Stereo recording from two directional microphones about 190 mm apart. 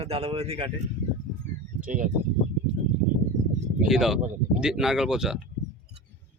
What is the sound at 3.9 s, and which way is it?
Speech, centre (ahead or behind).